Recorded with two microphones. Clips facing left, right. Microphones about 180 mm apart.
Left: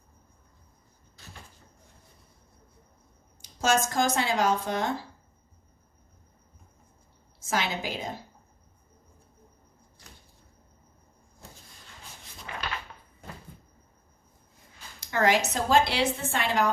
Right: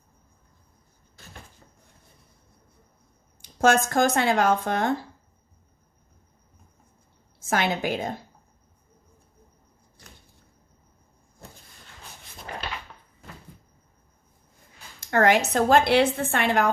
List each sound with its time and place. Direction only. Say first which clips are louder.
3.4 s a woman's voice: right 5 dB; 55° right (ahead or behind)
7.3 s a woman's voice: right 5 dB; 55° right (ahead or behind)
12.5 s drawer open or close: right 3 dB; 40° right (ahead or behind)
15.0 s a woman's voice: right 4 dB; 55° right (ahead or behind)